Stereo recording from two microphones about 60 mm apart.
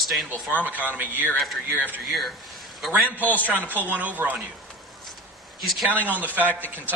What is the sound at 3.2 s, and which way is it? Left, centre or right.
Speech, left.